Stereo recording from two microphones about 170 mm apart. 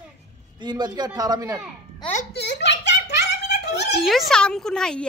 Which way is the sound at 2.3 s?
90° left.